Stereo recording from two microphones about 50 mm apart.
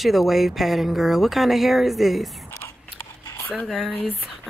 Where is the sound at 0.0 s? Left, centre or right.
Centre.